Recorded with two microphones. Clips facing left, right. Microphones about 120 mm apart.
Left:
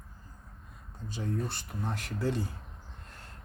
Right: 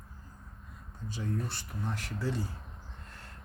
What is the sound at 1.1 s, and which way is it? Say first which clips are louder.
Speech: left 2 dB; 20° left (ahead or behind).